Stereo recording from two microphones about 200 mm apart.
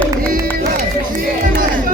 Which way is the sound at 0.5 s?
45° right (ahead or behind).